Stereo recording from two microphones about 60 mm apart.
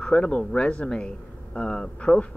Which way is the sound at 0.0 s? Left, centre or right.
Centre.